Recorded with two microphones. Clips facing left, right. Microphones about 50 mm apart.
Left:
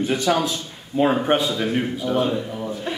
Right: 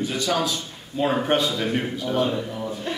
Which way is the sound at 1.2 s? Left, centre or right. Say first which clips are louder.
Left 2 dB; centre.